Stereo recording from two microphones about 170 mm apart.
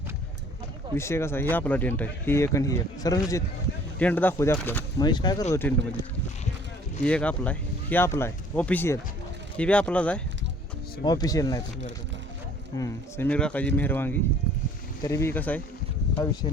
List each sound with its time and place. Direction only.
0.9 s speech: 15° left (ahead or behind)
3.9 s speech: 10° left (ahead or behind)
5.0 s speech: 25° left (ahead or behind)
7.0 s speech: 5° left (ahead or behind)
11.0 s speech: 25° left (ahead or behind)
12.7 s speech: 20° left (ahead or behind)
13.2 s speech: 5° left (ahead or behind)